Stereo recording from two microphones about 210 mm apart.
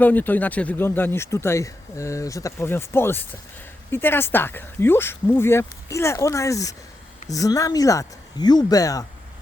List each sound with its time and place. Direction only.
0.0 s speech: 10° left (ahead or behind)